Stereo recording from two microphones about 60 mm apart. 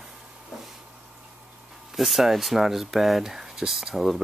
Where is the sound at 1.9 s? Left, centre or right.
Centre.